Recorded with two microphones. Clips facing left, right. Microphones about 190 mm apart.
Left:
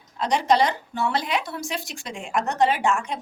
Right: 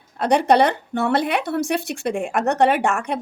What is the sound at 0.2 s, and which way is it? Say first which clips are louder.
Speech: right 5 dB; 60° right (ahead or behind).